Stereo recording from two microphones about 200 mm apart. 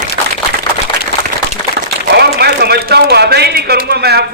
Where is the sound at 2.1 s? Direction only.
55° right (ahead or behind).